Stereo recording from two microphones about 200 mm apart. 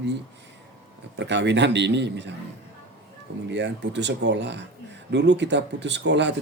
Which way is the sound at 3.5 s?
60° right (ahead or behind).